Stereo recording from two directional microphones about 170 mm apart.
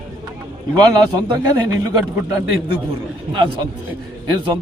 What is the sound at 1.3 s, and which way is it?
A man's voice, 20° right (ahead or behind).